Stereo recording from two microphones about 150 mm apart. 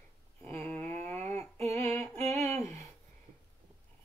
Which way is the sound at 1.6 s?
45° right (ahead or behind).